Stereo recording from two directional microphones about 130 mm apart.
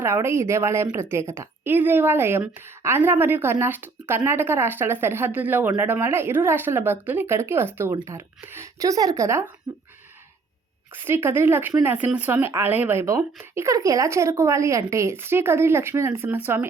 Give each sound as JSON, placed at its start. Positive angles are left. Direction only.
{"t": 0.0, "sound": "speech", "side_deg": -20}
{"t": 11.0, "sound": "speech", "side_deg": -20}